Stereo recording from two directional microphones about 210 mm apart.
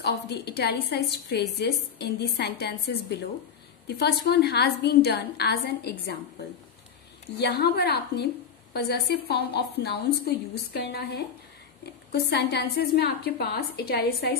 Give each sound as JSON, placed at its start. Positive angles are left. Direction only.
{"t": 0.0, "sound": "a woman's voice", "side_deg": 50}
{"t": 7.3, "sound": "a woman's voice", "side_deg": 50}